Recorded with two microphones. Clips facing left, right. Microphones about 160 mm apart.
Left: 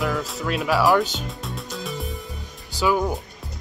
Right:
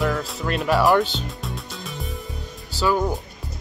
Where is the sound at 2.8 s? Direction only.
10° left (ahead or behind).